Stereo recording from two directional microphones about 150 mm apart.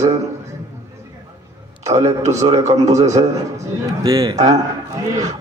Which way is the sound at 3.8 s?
25° right (ahead or behind).